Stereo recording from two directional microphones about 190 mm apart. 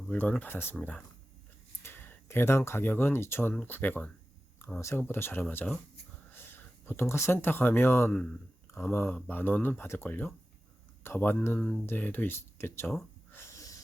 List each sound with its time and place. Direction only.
0.1 s speech: 10° left (ahead or behind)
13.3 s snort: 15° left (ahead or behind)